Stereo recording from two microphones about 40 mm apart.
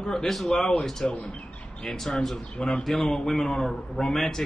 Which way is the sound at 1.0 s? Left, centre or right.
Left.